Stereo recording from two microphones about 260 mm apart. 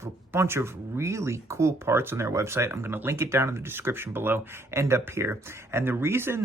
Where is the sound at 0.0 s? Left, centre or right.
Centre.